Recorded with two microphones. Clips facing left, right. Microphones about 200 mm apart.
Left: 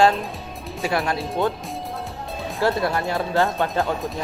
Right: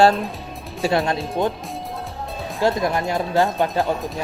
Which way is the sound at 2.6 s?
15° right (ahead or behind).